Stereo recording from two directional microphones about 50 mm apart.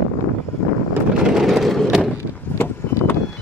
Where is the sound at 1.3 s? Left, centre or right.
Centre.